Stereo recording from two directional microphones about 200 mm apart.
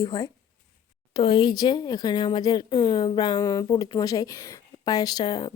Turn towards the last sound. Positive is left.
turn(degrees=20)  # may be behind; listen again after turning